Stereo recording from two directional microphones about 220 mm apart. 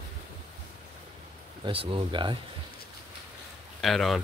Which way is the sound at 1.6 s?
25° right (ahead or behind).